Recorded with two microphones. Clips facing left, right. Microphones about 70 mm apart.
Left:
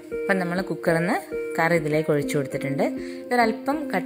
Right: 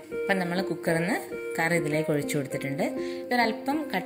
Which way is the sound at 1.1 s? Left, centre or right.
Left.